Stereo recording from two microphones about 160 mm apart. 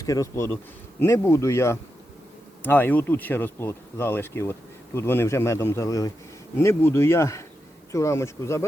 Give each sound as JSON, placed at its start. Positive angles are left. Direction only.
{"t": 0.0, "sound": "speech", "side_deg": 20}